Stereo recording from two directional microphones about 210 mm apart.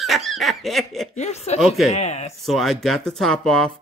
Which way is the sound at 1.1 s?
30° left (ahead or behind).